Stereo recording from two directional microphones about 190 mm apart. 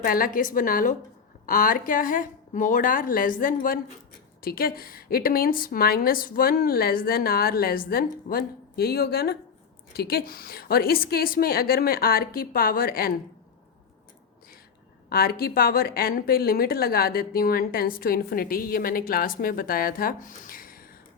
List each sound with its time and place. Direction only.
0.0 s a woman's voice: 50° left (ahead or behind)
15.1 s a woman's voice: 50° left (ahead or behind)